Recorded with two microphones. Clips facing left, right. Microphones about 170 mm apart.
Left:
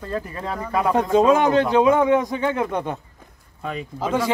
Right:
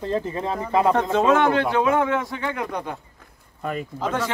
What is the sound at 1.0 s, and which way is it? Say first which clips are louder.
A man's voice: left 2 dB; 10° left (ahead or behind).